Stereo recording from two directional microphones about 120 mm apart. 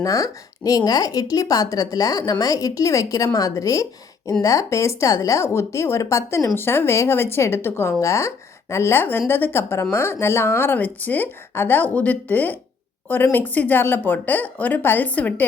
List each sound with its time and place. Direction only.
0.0 s a woman's voice: 30° left (ahead or behind); by 15.4 s 10° left (ahead or behind)